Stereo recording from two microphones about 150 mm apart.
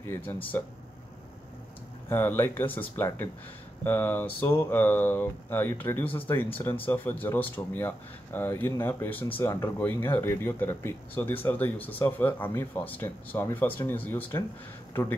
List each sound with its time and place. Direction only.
0.0 s speech: 15° left (ahead or behind)
2.0 s speech: 15° left (ahead or behind)